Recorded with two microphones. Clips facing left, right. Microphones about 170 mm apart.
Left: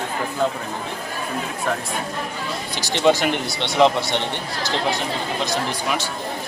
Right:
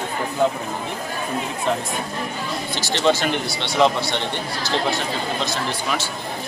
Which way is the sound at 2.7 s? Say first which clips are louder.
Left 2 dB; 15° left (ahead or behind).